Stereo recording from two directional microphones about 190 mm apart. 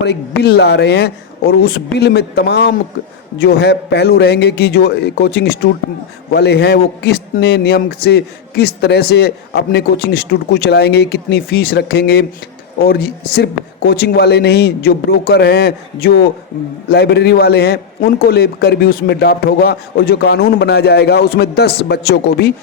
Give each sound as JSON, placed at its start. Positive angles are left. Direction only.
{"t": 0.0, "sound": "a man's voice", "side_deg": 60}